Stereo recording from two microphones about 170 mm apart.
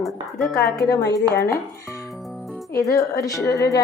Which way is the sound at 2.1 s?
Centre (ahead or behind).